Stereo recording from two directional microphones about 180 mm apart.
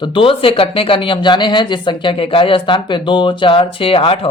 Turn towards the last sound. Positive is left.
turn(degrees=30)  # may be behind; listen again after turning